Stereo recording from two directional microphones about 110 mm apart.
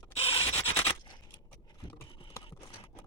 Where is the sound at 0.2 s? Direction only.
65° left (ahead or behind).